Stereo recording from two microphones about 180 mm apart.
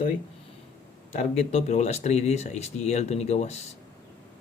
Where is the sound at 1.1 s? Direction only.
40° left (ahead or behind).